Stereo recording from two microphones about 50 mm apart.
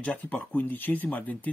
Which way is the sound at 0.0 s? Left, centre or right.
Left.